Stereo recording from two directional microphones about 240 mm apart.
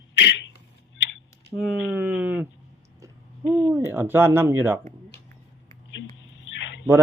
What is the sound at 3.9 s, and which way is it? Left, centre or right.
Speech, centre.